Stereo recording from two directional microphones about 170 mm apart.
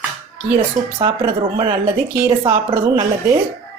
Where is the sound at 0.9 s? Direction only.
30° right (ahead or behind).